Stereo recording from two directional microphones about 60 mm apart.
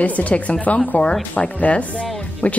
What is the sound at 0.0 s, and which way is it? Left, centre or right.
Speech, left.